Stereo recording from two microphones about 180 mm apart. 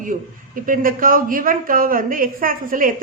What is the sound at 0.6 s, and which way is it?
A woman's voice, 50° right (ahead or behind).